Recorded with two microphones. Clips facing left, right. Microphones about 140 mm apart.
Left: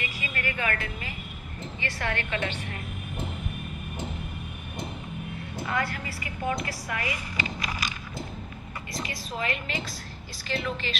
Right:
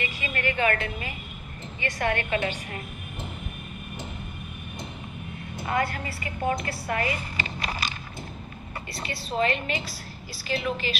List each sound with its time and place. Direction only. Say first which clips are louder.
0.0 s music: right 4 dB; 30° right (ahead or behind)
1.8 s a woman's voice: right 5 dB; 20° right (ahead or behind)
5.7 s a woman's voice: right 4 dB; 25° right (ahead or behind)
6.9 s a sound: right 8 dB; 30° right (ahead or behind)
9.0 s a woman's voice: right 7 dB; 30° right (ahead or behind)
10.5 s a woman's voice: right 3 dB; 10° right (ahead or behind)